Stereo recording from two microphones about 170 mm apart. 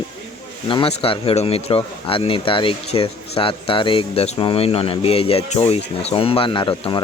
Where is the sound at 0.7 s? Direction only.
30° left (ahead or behind).